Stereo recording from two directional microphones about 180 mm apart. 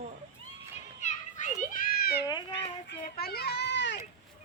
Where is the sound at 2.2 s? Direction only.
25° left (ahead or behind).